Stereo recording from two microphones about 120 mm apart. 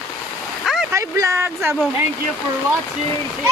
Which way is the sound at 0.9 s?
25° right (ahead or behind).